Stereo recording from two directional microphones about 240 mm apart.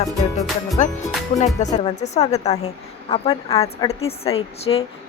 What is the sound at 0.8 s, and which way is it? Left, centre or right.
Speech, left.